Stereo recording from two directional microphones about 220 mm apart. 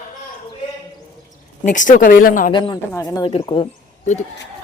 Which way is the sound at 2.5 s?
20° left (ahead or behind).